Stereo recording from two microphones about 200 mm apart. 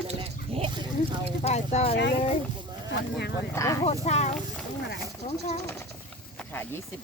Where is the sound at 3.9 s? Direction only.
35° left (ahead or behind).